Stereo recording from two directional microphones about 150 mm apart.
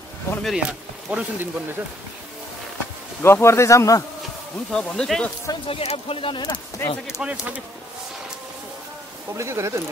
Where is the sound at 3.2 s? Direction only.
15° left (ahead or behind).